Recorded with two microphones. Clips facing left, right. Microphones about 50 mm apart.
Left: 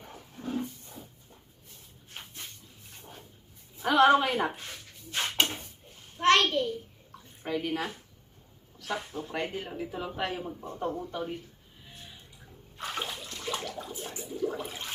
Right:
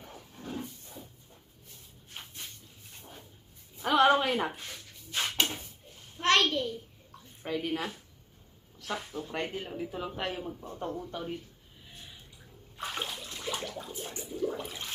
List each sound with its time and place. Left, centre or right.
0.1 s dog: centre
2.9 s dog: centre
3.8 s a sound: centre
5.4 s drawer open or close: centre
6.1 s a sound: centre
7.4 s speech: centre
12.7 s water: centre
13.4 s toilet flush: centre